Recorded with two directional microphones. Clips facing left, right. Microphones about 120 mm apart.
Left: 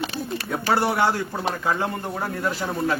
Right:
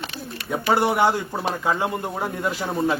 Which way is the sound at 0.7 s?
15° right (ahead or behind).